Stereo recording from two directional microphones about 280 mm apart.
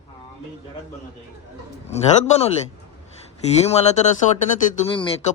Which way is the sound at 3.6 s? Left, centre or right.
Left.